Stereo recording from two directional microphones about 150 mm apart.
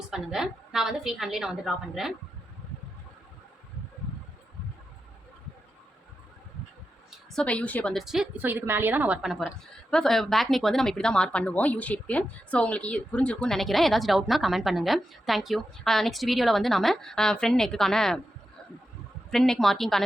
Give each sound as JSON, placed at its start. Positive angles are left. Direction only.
{"t": 0.1, "sound": "speech", "side_deg": -5}
{"t": 7.3, "sound": "a woman's voice", "side_deg": 10}
{"t": 7.9, "sound": "a woman's voice", "side_deg": -5}
{"t": 19.3, "sound": "speech", "side_deg": 0}